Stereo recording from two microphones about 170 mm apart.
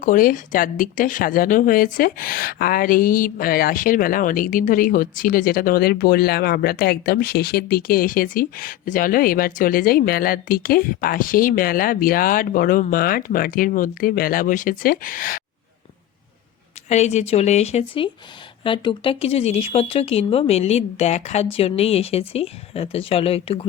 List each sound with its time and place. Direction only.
0.0 s speech: 50° left (ahead or behind)
16.9 s speech: 40° left (ahead or behind)